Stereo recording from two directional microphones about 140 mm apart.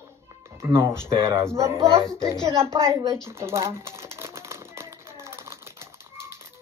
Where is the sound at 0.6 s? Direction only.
20° right (ahead or behind).